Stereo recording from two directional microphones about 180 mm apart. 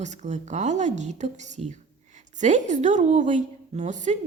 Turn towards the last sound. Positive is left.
turn(degrees=-40)  # may be behind; listen again after turning